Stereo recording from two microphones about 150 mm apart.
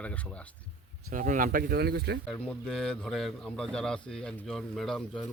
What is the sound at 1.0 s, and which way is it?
Speech, 60° right (ahead or behind).